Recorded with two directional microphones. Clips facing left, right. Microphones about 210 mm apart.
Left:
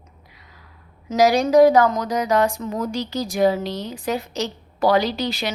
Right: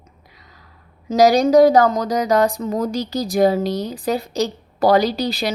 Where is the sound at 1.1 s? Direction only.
35° right (ahead or behind).